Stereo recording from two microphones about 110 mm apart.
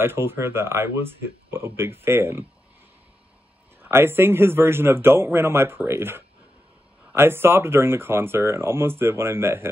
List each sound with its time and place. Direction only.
0.0 s speech: 20° right (ahead or behind)
3.9 s speech: 20° right (ahead or behind)